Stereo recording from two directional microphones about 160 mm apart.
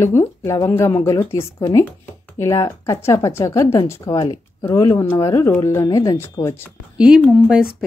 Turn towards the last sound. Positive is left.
turn(degrees=-5)  # may be behind; listen again after turning